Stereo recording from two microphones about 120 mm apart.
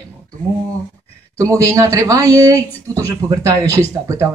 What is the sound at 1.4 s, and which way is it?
Speech, 30° right (ahead or behind).